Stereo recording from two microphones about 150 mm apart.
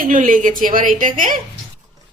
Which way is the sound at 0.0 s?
60° right (ahead or behind).